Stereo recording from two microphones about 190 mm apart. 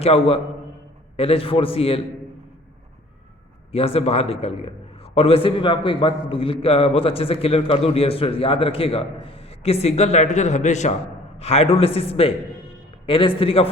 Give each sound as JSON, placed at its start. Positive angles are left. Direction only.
{"t": 0.0, "sound": "a man's voice", "side_deg": 30}
{"t": 3.7, "sound": "a man's voice", "side_deg": 30}